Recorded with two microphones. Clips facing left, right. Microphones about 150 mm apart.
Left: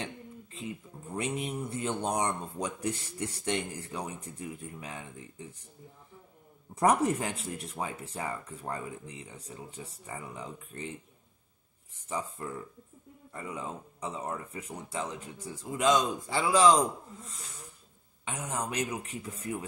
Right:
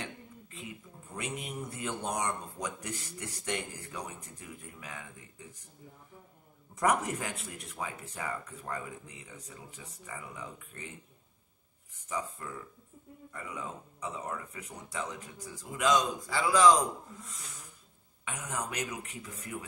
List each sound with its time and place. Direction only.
0.0 s a sound: 30° left (ahead or behind)
1.1 s speech: 30° left (ahead or behind)
6.7 s speech: 30° left (ahead or behind)
12.1 s speech: 30° left (ahead or behind)